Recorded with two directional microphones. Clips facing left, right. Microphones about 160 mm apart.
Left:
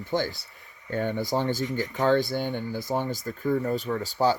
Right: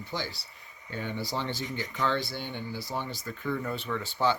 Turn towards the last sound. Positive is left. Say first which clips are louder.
# left 4 dB
turn(degrees=40)  # may be behind; listen again after turning